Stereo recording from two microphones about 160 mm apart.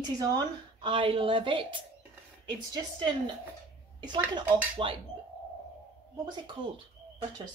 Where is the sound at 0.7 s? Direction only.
30° right (ahead or behind).